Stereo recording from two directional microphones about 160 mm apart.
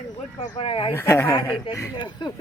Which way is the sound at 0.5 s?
35° left (ahead or behind).